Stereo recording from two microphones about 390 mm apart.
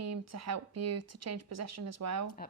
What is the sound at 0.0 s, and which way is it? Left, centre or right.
Speech, right.